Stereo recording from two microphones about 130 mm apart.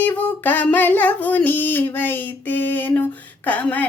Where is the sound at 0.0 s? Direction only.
15° left (ahead or behind).